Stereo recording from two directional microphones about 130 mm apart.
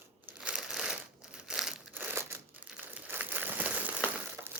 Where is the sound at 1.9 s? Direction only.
15° right (ahead or behind).